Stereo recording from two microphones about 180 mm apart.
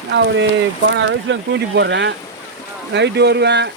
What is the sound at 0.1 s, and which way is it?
Speech, 75° right (ahead or behind).